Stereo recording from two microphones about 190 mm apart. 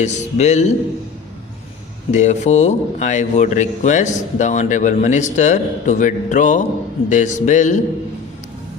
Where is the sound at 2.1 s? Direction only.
40° left (ahead or behind).